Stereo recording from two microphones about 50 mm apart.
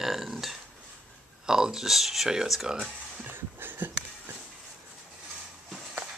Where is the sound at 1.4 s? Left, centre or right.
Centre.